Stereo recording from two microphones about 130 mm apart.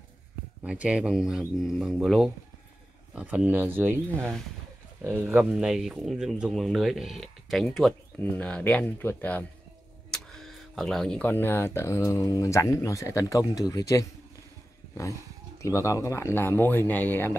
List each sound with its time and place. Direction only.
0.7 s speech: 10° right (ahead or behind); by 14.0 s 25° left (ahead or behind)
15.6 s speech: 25° left (ahead or behind)